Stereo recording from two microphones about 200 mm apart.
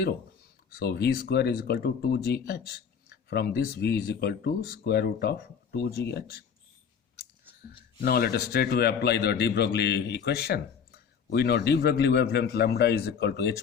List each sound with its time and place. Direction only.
0.7 s speech: 50° left (ahead or behind)
8.0 s a man's voice: 50° left (ahead or behind)